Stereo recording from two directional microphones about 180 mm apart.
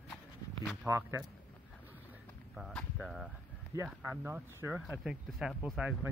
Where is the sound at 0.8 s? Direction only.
15° right (ahead or behind).